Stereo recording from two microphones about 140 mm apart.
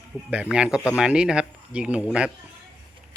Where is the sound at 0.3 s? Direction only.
5° right (ahead or behind).